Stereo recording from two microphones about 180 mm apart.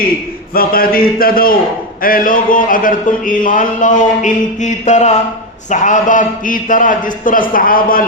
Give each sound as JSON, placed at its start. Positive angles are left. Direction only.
{"t": 0.5, "sound": "speech", "side_deg": 55}